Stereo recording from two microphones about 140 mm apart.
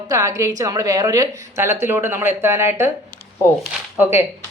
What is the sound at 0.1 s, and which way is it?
A woman's voice, 25° right (ahead or behind).